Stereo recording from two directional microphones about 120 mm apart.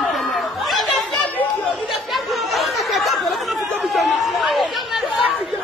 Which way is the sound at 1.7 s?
Centre (ahead or behind).